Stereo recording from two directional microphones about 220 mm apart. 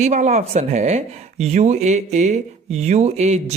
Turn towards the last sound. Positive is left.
turn(degrees=-30)  # may be behind; listen again after turning